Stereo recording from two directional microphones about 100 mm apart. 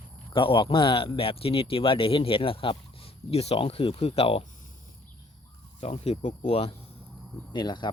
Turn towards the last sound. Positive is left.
turn(degrees=50)  # may be behind; listen again after turning